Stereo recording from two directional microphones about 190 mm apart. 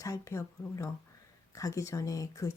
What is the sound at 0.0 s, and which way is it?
Speech, 15° left (ahead or behind).